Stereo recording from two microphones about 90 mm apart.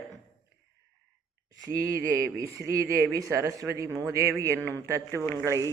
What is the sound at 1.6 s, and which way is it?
Speech, 40° right (ahead or behind).